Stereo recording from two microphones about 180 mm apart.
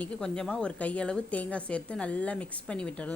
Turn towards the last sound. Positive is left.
turn(degrees=5)  # may be behind; listen again after turning